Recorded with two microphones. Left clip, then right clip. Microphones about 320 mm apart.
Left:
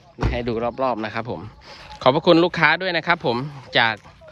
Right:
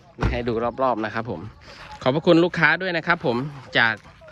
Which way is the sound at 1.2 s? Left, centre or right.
Centre.